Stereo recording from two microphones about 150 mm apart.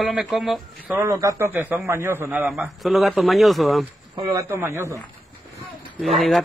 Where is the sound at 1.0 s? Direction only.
20° right (ahead or behind); by 3.8 s centre (ahead or behind).